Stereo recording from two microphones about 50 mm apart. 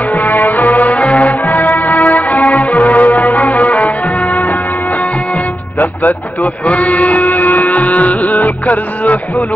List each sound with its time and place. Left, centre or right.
0.1 s music: left
5.8 s music: left